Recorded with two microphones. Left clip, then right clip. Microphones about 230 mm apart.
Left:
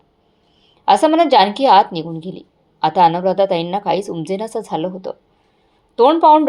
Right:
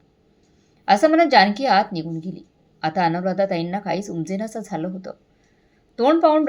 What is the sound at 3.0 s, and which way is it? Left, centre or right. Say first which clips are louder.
Speech: left 8 dB; left.